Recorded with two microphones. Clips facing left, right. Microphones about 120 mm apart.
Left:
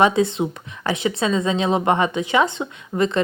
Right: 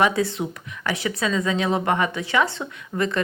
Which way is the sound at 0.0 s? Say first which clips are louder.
Left 4 dB; 20° left (ahead or behind).